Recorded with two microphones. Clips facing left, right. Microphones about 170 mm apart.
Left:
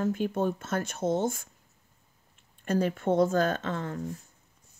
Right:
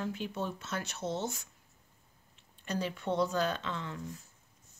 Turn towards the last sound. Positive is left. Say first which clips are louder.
# left 7 dB
turn(degrees=45)  # may be behind; listen again after turning